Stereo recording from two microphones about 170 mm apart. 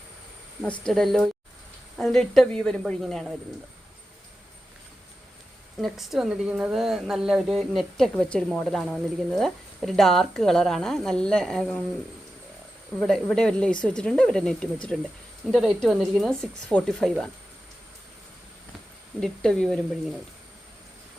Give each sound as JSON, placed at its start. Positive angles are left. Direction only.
{"t": 0.6, "sound": "speech", "side_deg": 5}
{"t": 5.8, "sound": "speech", "side_deg": 0}
{"t": 13.0, "sound": "speech", "side_deg": 5}
{"t": 19.2, "sound": "speech", "side_deg": 5}